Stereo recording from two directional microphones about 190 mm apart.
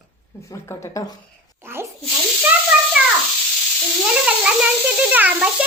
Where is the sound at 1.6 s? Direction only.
10° right (ahead or behind).